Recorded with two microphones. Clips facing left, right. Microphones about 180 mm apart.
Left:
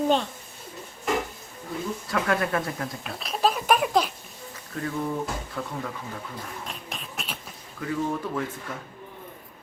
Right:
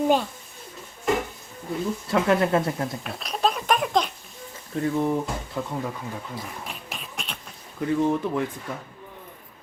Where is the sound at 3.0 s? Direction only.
Centre (ahead or behind).